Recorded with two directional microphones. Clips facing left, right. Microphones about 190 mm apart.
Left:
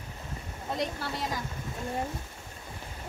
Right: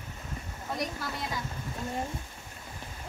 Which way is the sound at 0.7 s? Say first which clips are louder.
Left 2 dB; 30° left (ahead or behind).